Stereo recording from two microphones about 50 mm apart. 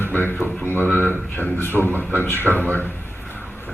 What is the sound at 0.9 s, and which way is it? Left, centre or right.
Speech, left.